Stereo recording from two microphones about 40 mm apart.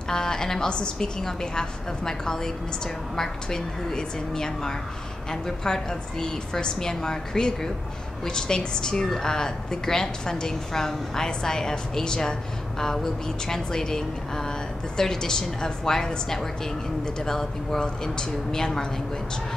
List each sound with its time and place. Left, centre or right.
0.1 s a woman's voice: centre